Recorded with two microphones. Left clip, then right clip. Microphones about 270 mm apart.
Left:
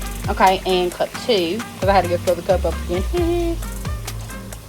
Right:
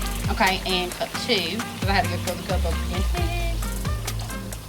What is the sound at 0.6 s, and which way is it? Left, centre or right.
Speech, centre.